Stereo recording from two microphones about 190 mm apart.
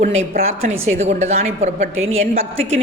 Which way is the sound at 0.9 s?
35° right (ahead or behind).